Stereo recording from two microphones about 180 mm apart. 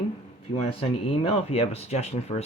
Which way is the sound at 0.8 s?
35° left (ahead or behind).